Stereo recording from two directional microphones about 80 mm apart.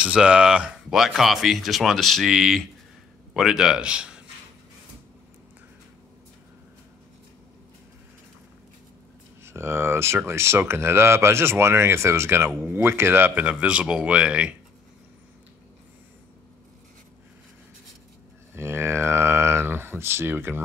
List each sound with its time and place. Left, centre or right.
0.0 s speech: centre
9.4 s speech: right
13.3 s speech: centre
18.5 s speech: right